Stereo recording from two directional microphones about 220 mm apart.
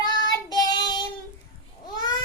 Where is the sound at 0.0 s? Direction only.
20° left (ahead or behind).